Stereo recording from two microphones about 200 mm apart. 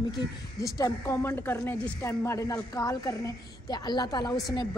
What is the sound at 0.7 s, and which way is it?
A woman's voice, 15° left (ahead or behind).